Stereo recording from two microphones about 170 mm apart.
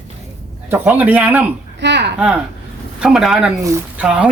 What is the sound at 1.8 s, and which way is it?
Speech, 90° right.